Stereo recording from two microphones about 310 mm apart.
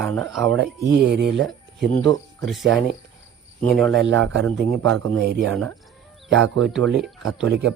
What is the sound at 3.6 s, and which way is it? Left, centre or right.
Speech, centre.